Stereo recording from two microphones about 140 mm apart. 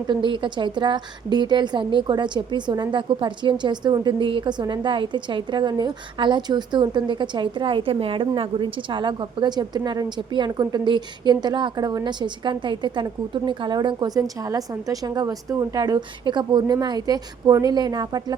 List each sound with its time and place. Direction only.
0.1 s a woman's voice: 35° right (ahead or behind)